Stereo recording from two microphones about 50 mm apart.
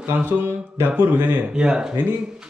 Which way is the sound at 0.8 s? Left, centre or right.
Right.